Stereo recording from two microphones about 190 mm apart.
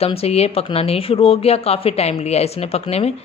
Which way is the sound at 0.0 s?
30° left (ahead or behind).